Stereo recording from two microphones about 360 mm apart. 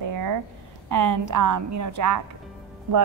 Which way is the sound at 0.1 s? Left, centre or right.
Right.